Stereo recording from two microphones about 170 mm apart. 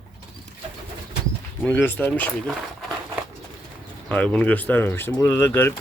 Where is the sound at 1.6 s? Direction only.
10° left (ahead or behind).